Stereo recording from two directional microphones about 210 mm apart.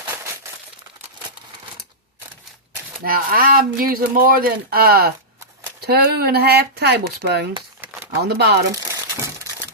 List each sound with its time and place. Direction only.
3.0 s speech: 45° right (ahead or behind)
8.7 s crumpling: 15° right (ahead or behind)